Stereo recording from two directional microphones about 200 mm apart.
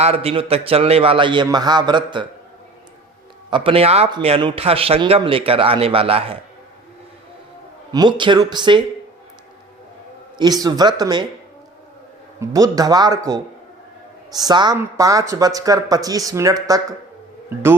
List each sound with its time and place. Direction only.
0.0 s speech: 30° right (ahead or behind)
3.5 s speech: 25° right (ahead or behind)
7.9 s speech: 20° right (ahead or behind)
10.3 s speech: 20° right (ahead or behind)
12.4 s speech: 15° right (ahead or behind)